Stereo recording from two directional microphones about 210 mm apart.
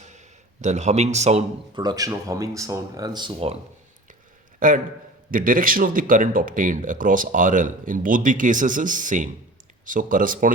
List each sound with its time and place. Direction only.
0.0 s a man's voice: 35° right (ahead or behind)
4.6 s speech: 40° right (ahead or behind)